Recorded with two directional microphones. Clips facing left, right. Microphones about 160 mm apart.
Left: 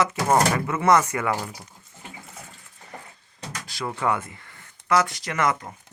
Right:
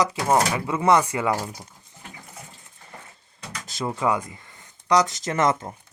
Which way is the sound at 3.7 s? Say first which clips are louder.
Right 2 dB; 20° right (ahead or behind).